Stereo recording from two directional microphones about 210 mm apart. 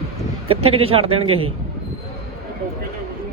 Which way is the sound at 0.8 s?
25° right (ahead or behind).